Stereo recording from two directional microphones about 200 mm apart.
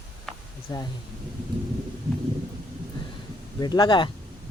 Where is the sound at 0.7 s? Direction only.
20° left (ahead or behind).